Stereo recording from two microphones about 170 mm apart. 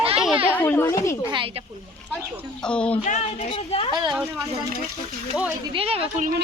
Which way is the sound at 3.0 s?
45° left (ahead or behind).